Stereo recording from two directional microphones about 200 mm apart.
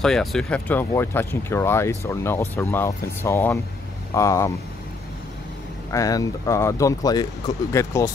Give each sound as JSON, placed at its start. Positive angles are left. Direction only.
{"t": 0.0, "sound": "speech", "side_deg": 0}
{"t": 5.9, "sound": "speech", "side_deg": 15}